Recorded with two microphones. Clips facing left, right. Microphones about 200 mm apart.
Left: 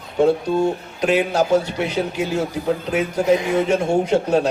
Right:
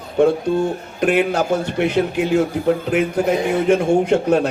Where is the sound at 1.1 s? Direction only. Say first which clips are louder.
Left 1 dB; 55° right (ahead or behind).